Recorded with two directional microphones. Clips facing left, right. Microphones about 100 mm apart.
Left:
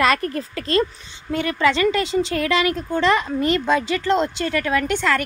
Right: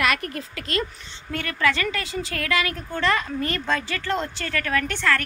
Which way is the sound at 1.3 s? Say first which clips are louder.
Left 5 dB; 20° left (ahead or behind).